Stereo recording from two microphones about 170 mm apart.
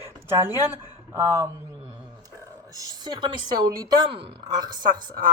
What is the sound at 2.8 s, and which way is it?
A woman's voice, 25° right (ahead or behind).